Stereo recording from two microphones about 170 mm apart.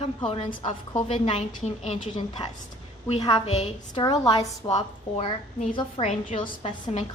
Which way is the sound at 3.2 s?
25° left (ahead or behind).